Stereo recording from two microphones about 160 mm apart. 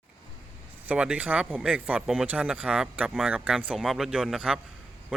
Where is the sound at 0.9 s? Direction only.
5° right (ahead or behind).